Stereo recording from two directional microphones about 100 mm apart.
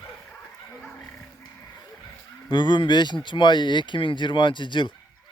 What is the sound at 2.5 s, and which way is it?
Speech, 50° left (ahead or behind).